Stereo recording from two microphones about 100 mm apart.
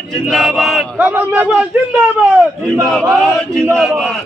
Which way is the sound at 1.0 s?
15° right (ahead or behind).